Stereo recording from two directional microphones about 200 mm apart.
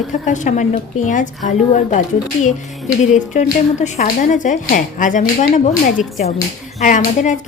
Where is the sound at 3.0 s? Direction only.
35° left (ahead or behind).